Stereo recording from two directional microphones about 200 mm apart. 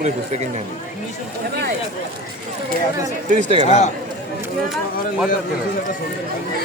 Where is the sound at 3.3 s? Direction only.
30° right (ahead or behind).